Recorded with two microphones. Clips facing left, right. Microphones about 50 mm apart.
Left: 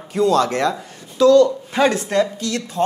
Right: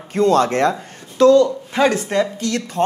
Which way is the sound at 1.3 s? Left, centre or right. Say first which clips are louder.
Left 1 dB; right.